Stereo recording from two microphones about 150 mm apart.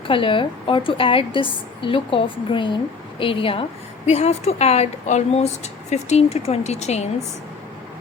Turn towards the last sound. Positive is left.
turn(degrees=45)  # may be behind; listen again after turning